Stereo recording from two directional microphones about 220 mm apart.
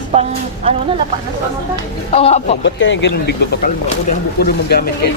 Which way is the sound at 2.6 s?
55° left (ahead or behind).